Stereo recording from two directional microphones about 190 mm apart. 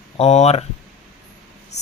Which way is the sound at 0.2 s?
35° left (ahead or behind).